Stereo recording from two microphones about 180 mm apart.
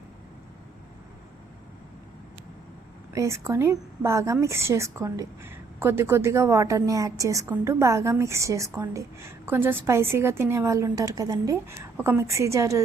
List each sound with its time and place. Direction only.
3.1 s a woman's voice: 15° right (ahead or behind)